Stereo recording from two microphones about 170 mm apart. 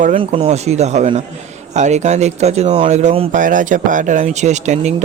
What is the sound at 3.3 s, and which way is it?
Speech, 50° right (ahead or behind).